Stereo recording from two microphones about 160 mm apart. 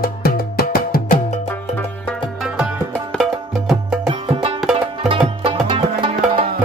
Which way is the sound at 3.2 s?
Centre (ahead or behind).